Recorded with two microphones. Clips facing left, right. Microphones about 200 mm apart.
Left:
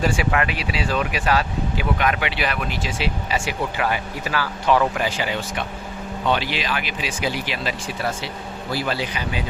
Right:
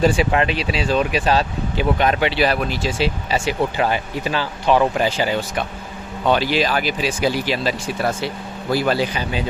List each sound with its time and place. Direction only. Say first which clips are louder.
0.0 s speech: right 5 dB; 25° right (ahead or behind)